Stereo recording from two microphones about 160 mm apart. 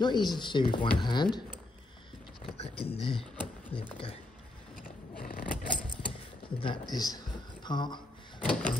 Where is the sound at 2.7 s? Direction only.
35° left (ahead or behind).